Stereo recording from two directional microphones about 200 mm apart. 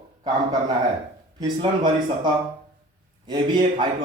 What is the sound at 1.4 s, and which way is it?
A man's voice, 20° right (ahead or behind).